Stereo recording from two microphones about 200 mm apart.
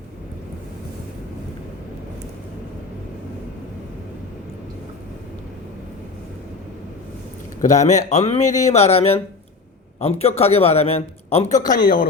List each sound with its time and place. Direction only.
7.6 s a man's voice: 35° left (ahead or behind)